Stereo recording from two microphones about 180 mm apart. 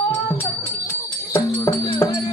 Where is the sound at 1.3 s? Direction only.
15° left (ahead or behind).